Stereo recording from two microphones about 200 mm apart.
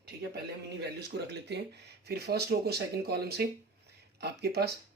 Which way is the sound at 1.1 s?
55° right (ahead or behind).